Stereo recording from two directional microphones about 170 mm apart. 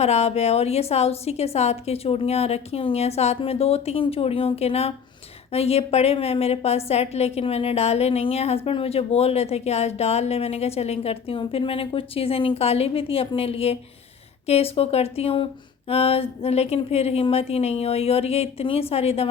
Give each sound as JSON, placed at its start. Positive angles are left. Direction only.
{"t": 0.0, "sound": "a woman's voice", "side_deg": 40}